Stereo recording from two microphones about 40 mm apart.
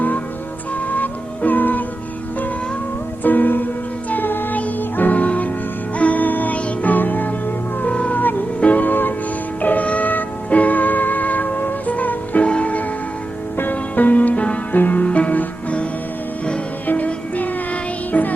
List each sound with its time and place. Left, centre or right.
0.9 s music: left
3.2 s music: left
7.9 s music: left
8.6 s music: left
9.6 s music: left
13.6 s music: left
16.8 s music: left
18.1 s music: left